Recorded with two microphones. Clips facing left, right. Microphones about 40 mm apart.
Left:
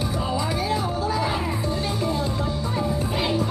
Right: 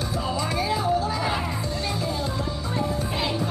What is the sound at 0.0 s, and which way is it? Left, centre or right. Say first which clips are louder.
Music: left 1 dB; centre.